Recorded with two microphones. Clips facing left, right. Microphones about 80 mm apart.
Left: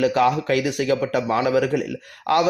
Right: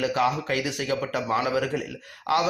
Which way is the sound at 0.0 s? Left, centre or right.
Left.